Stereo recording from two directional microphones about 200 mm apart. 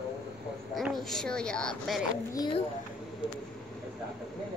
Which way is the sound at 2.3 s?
20° left (ahead or behind).